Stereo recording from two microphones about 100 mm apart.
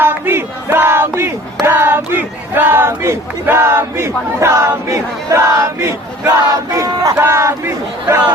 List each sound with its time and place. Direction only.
0.0 s a sound: 20° right (ahead or behind)
1.6 s speech: 25° right (ahead or behind)
6.8 s battle cry: 35° right (ahead or behind)
7.2 s speech: 30° right (ahead or behind)